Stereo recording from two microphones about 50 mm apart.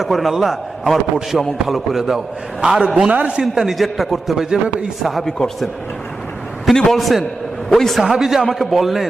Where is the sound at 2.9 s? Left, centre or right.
Right.